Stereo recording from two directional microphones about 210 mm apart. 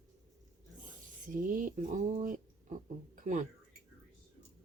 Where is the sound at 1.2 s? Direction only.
40° right (ahead or behind).